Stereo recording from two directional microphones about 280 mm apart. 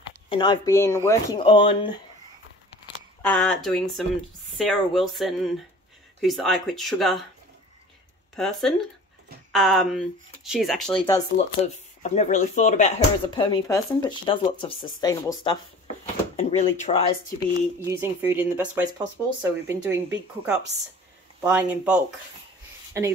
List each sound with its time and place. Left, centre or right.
0.3 s speech: centre
3.2 s speech: centre
8.4 s speech: centre
11.3 s speech: left
13.4 s speech: centre
17.6 s speech: centre